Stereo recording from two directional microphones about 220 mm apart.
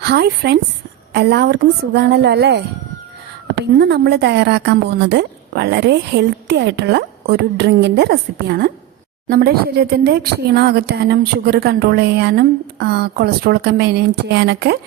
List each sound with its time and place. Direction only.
0.0 s speech: 45° right (ahead or behind)